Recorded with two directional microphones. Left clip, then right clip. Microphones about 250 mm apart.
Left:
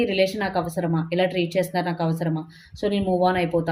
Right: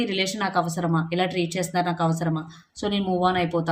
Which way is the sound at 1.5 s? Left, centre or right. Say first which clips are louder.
Left 1 dB; right.